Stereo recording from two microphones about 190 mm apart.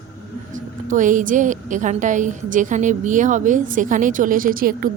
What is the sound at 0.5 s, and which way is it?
A woman's voice, 40° right (ahead or behind).